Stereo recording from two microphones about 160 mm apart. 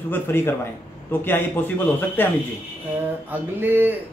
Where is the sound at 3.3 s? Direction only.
10° right (ahead or behind).